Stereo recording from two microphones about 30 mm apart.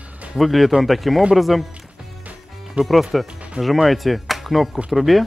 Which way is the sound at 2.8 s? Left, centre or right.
Right.